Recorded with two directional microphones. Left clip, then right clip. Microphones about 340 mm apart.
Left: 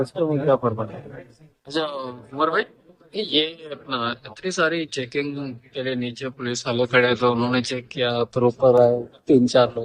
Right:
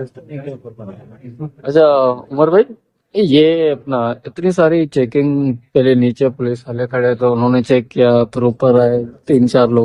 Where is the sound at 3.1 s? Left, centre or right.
Centre.